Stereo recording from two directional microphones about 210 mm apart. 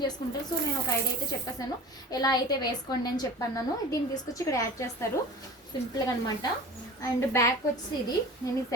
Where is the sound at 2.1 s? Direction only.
20° left (ahead or behind).